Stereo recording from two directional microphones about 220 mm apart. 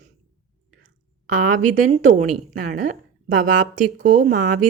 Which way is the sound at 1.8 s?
35° right (ahead or behind).